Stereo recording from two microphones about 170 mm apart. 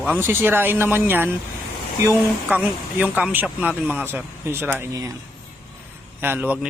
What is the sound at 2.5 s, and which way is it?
Speech, 10° right (ahead or behind).